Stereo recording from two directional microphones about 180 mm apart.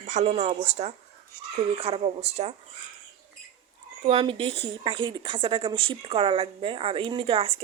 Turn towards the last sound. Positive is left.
turn(degrees=-35)  # may be behind; listen again after turning